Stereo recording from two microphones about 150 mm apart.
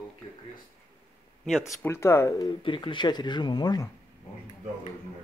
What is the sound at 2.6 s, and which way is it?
Speech, 35° left (ahead or behind).